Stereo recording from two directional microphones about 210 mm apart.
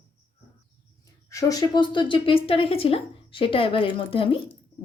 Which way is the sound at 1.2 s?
15° left (ahead or behind).